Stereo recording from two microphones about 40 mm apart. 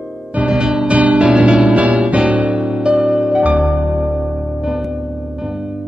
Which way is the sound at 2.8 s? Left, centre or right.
Centre.